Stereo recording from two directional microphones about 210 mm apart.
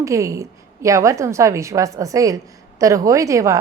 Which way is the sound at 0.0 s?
15° right (ahead or behind).